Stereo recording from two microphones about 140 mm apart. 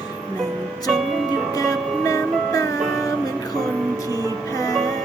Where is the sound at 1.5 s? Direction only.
25° left (ahead or behind).